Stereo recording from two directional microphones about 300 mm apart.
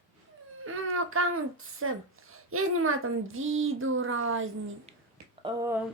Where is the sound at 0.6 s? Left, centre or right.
Right.